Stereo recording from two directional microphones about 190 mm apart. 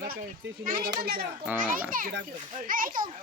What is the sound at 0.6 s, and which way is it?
Speech, 45° right (ahead or behind).